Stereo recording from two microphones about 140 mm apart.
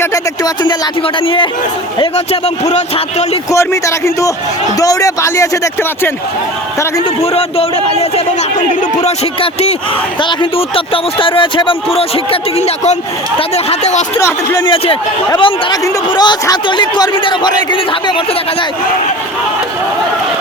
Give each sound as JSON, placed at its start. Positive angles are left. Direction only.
{"t": 0.0, "sound": "a man's voice", "side_deg": 25}
{"t": 3.5, "sound": "speech", "side_deg": 20}
{"t": 7.0, "sound": "a man's voice", "side_deg": 45}
{"t": 10.2, "sound": "a man's voice", "side_deg": 35}
{"t": 14.2, "sound": "speech", "side_deg": 20}
{"t": 14.6, "sound": "a man's voice", "side_deg": 35}